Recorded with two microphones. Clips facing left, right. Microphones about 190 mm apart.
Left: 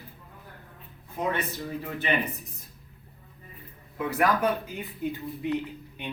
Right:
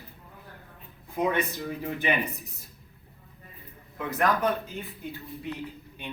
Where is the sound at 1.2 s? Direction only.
15° right (ahead or behind).